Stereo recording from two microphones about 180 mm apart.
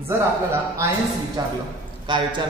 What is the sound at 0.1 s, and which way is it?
A man's voice, 15° right (ahead or behind).